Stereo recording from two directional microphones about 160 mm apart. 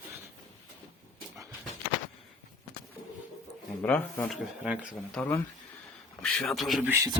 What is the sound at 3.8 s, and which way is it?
Speech, 10° left (ahead or behind).